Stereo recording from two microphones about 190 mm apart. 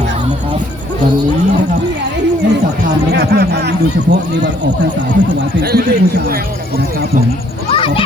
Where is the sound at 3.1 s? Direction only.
60° right (ahead or behind).